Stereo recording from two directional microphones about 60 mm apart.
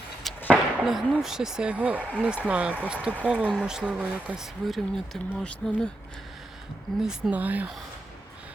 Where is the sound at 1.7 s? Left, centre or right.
Right.